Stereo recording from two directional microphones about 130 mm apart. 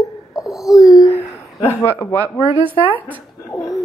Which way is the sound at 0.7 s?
30° left (ahead or behind).